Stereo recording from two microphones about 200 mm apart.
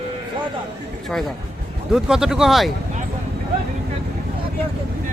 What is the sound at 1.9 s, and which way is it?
Speech, 5° right (ahead or behind).